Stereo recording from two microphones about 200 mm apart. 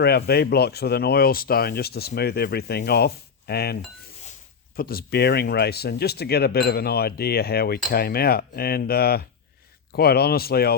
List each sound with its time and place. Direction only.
0.0 s speech: 55° left (ahead or behind)
4.8 s speech: 50° left (ahead or behind)